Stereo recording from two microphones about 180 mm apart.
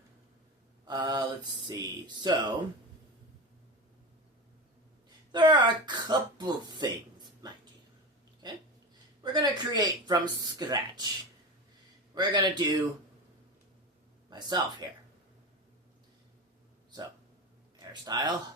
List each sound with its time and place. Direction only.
0.9 s mantra: 20° right (ahead or behind)
1.6 s speech: 25° right (ahead or behind)
5.3 s speech: 25° right (ahead or behind)
8.4 s hiccup: 25° right (ahead or behind)
9.2 s speech: 25° right (ahead or behind)
12.1 s speech: 25° right (ahead or behind)
14.3 s speech: 25° right (ahead or behind)
18.0 s speech: 20° right (ahead or behind)